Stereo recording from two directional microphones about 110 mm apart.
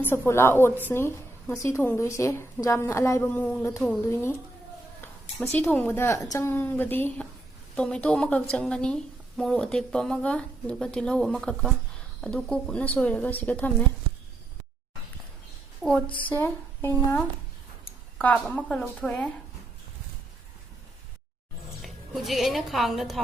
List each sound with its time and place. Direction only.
0.1 s a woman's voice: 20° left (ahead or behind)
3.2 s speech: 15° left (ahead or behind)
4.1 s a woman's voice: 25° left (ahead or behind)
5.4 s a woman's voice: 15° left (ahead or behind)
15.8 s a woman's voice: 5° left (ahead or behind)
16.0 s a woman's voice: 50° left (ahead or behind)
16.3 s speech: 20° left (ahead or behind)
21.8 s a woman's voice: centre (ahead or behind)